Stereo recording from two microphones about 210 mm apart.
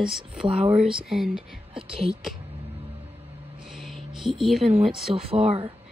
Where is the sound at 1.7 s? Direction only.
25° right (ahead or behind).